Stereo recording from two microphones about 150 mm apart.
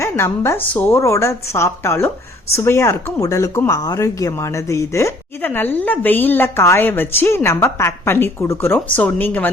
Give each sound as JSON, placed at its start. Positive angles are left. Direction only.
{"t": 0.0, "sound": "a woman's voice", "side_deg": 15}